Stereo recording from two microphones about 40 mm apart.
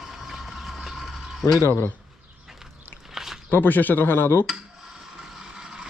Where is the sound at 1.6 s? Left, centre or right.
Left.